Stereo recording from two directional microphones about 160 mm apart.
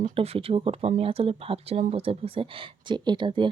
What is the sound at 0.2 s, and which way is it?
Speech, 35° right (ahead or behind).